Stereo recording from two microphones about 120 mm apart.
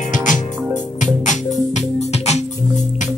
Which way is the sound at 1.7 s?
65° left (ahead or behind).